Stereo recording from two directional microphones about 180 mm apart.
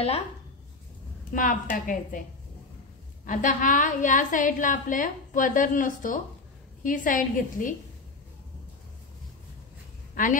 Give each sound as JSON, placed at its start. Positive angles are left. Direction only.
{"t": 1.3, "sound": "a woman's voice", "side_deg": 50}
{"t": 3.3, "sound": "a woman's voice", "side_deg": 45}